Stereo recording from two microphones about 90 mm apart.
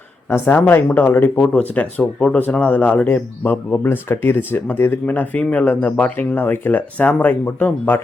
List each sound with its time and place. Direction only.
0.3 s speech: 25° left (ahead or behind)